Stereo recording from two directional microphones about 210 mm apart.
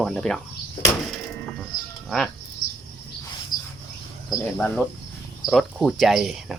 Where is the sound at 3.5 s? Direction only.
20° left (ahead or behind).